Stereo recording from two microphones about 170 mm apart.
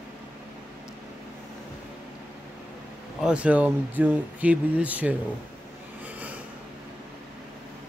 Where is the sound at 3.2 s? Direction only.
5° right (ahead or behind).